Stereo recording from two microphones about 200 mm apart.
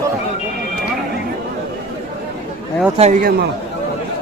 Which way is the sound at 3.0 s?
40° right (ahead or behind).